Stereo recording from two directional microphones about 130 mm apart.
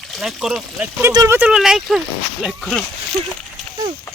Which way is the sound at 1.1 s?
30° right (ahead or behind).